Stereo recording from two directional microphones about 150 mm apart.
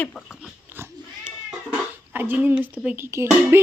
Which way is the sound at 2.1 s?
10° right (ahead or behind).